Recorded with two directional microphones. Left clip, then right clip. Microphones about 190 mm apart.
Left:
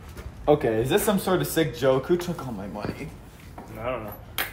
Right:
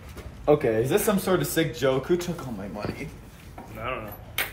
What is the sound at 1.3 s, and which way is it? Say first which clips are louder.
Speech: left 1 dB; 30° left (ahead or behind).